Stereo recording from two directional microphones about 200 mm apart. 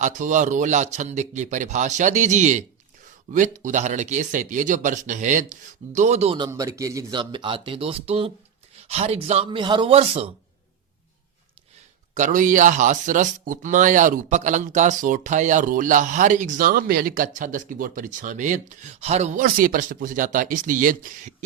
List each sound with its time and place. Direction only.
0.0 s speech: 40° right (ahead or behind)
6.5 s speech: 15° right (ahead or behind)
12.1 s speech: 40° right (ahead or behind)